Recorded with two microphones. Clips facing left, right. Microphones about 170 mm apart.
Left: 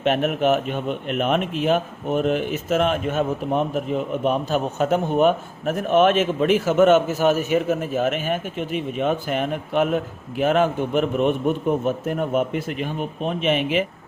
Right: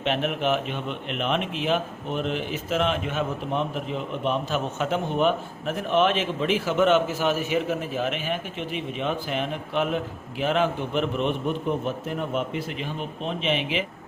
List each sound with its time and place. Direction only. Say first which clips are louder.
0.0 s speech: left 5 dB; 45° left (ahead or behind)